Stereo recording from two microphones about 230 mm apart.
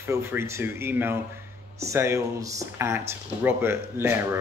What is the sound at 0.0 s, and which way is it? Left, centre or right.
Speech, centre.